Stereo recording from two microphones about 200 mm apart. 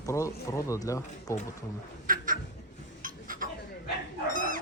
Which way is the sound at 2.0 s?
45° right (ahead or behind).